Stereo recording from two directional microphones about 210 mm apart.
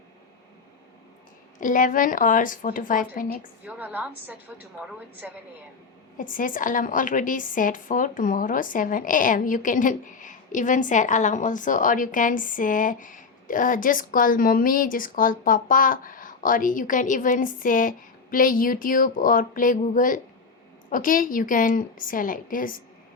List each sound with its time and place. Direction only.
1.5 s a woman's voice: 40° left (ahead or behind)
3.7 s a woman's voice: 10° right (ahead or behind)
6.1 s a woman's voice: 40° left (ahead or behind)